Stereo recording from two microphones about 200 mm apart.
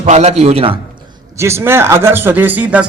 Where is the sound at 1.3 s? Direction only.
15° right (ahead or behind).